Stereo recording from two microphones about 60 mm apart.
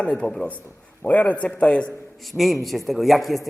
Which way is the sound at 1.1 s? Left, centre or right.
Left.